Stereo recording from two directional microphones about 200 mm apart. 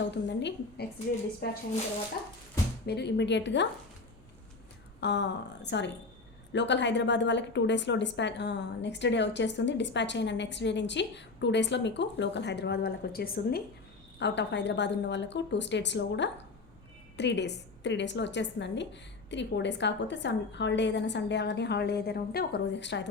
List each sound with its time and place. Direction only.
0.0 s a woman's voice: 60° left (ahead or behind)
2.8 s a woman's voice: 55° left (ahead or behind)
4.9 s a woman's voice: 60° left (ahead or behind)
14.2 s a woman's voice: 60° left (ahead or behind)